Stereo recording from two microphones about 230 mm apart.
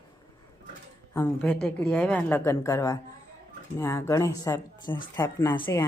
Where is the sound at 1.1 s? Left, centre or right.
Centre.